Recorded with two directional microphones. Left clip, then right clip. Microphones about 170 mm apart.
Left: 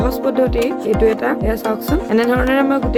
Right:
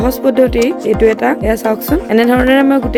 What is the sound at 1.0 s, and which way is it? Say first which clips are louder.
Speech: right 4 dB; 45° right (ahead or behind).